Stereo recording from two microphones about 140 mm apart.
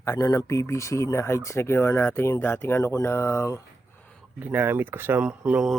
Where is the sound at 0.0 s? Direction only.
25° left (ahead or behind).